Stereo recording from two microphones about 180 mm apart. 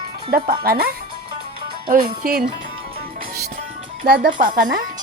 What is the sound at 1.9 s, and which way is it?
Speech, 55° right (ahead or behind).